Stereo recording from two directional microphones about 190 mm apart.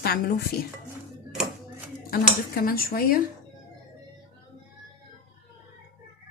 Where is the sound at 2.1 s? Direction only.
50° left (ahead or behind).